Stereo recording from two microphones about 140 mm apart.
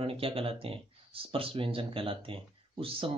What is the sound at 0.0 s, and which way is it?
Speech, 40° right (ahead or behind).